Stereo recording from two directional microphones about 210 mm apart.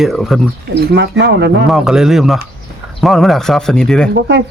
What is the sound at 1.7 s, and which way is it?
Speech, 5° right (ahead or behind).